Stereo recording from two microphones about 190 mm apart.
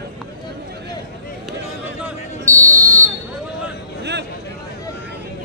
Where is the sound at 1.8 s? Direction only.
15° right (ahead or behind).